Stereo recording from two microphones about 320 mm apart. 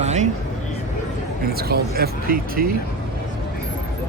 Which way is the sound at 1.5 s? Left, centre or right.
Right.